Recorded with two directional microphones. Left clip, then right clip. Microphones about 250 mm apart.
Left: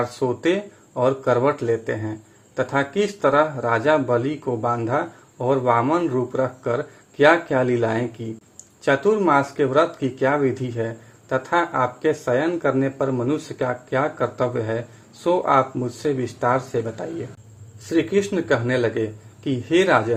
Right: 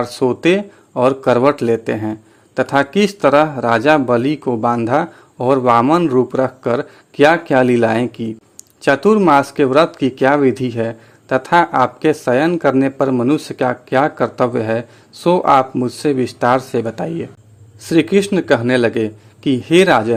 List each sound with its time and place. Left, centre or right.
0.0 s speech: right